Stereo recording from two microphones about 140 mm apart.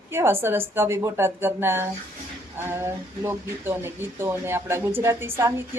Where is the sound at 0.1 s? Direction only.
15° right (ahead or behind).